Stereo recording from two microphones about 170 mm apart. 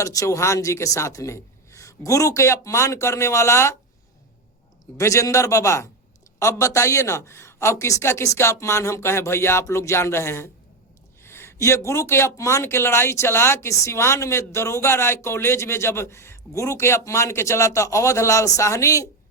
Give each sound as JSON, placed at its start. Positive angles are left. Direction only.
{"t": 0.0, "sound": "speech", "side_deg": 20}
{"t": 4.9, "sound": "a man's voice", "side_deg": 20}